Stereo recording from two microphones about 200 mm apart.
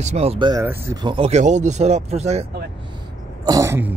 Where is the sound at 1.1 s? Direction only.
30° right (ahead or behind).